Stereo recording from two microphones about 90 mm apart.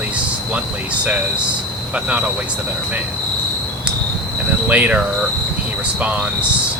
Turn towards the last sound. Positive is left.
turn(degrees=-15)  # may be behind; listen again after turning